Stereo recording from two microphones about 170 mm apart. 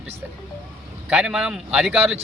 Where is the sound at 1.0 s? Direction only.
5° right (ahead or behind).